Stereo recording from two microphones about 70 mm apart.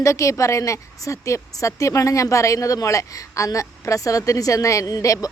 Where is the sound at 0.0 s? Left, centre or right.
Left.